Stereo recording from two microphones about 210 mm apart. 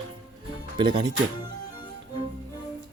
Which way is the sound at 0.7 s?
20° right (ahead or behind).